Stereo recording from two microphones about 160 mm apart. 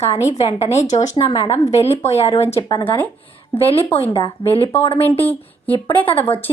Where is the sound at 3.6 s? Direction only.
35° left (ahead or behind).